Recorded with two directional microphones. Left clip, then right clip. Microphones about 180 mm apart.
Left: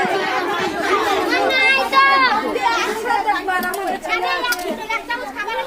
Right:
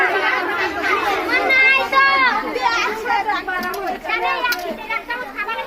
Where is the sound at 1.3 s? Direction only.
25° right (ahead or behind).